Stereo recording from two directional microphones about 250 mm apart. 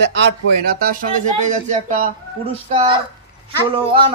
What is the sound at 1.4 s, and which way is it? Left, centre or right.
Speech, right.